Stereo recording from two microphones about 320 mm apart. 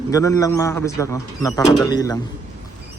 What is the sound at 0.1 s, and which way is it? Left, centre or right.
A man's voice, centre.